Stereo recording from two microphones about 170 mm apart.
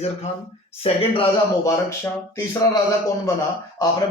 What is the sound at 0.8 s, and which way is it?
Speech, 35° left (ahead or behind).